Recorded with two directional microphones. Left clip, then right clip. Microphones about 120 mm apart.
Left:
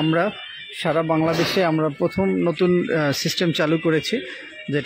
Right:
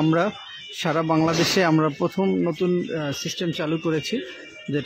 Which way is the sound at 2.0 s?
5° right (ahead or behind).